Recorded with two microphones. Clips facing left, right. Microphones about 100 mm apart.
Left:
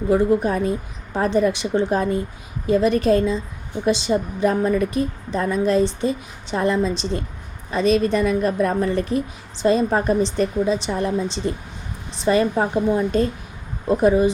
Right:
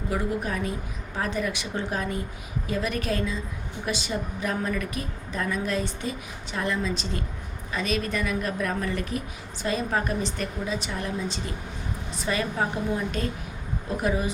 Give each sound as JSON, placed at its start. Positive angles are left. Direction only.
{"t": 0.1, "sound": "a woman's voice", "side_deg": 30}